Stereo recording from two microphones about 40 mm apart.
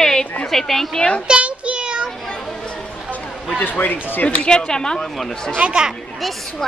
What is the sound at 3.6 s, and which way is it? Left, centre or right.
Speech, left.